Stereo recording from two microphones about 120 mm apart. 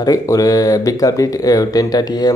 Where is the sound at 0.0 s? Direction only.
30° left (ahead or behind).